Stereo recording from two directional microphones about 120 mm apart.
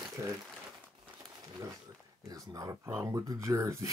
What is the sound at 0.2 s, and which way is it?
Speech, 25° right (ahead or behind).